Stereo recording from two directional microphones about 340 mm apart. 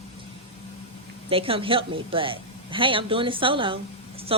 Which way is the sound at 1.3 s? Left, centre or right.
Centre.